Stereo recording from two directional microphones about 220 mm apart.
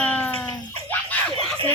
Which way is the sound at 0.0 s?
5° left (ahead or behind).